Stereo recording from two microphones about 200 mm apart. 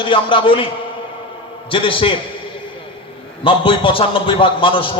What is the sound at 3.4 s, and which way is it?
A man's voice, 25° left (ahead or behind).